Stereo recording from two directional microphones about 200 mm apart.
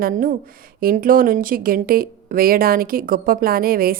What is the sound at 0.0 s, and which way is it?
A woman's voice, 45° right (ahead or behind).